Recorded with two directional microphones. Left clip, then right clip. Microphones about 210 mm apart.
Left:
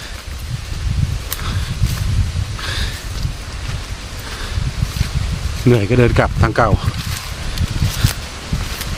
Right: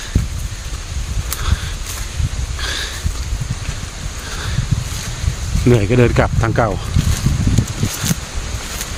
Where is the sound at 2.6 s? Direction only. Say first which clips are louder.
Right 2 dB; 5° right (ahead or behind).